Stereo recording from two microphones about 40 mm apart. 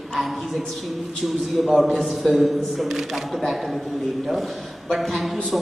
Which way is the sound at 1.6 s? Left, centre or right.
Centre.